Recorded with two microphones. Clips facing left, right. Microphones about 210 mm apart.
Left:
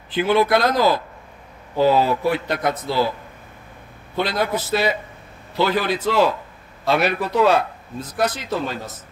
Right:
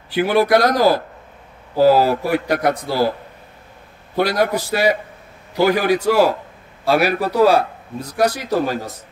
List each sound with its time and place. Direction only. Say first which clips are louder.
0.1 s speech: right 2 dB; 10° right (ahead or behind)
2.2 s speech: right 3 dB; 10° right (ahead or behind)
2.9 s a man's voice: right 1 dB; 40° right (ahead or behind)
4.2 s a man's voice: right 4 dB; 10° right (ahead or behind)
7.2 s a man's voice: right 3 dB; 35° right (ahead or behind)
7.4 s speech: right 4 dB; 10° right (ahead or behind)